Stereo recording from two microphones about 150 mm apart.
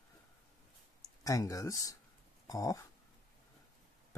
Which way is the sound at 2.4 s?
25° left (ahead or behind).